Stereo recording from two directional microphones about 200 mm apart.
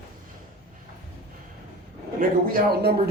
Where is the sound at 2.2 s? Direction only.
50° right (ahead or behind).